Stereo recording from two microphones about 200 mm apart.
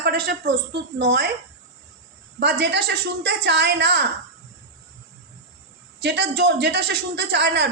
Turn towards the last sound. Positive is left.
turn(degrees=-55)  # may be behind; listen again after turning